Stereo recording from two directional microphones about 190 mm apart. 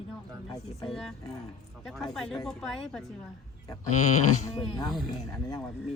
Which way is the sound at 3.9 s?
40° left (ahead or behind).